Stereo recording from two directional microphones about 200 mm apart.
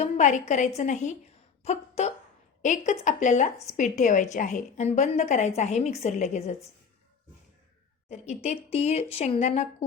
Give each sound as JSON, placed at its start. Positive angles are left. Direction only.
{"t": 0.0, "sound": "a woman's voice", "side_deg": 35}
{"t": 8.1, "sound": "a woman's voice", "side_deg": 35}